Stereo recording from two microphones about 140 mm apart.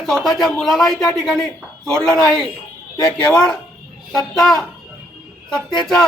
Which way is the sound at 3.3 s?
5° left (ahead or behind).